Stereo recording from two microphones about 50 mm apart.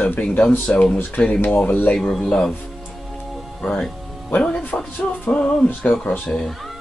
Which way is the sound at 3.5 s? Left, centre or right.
Left.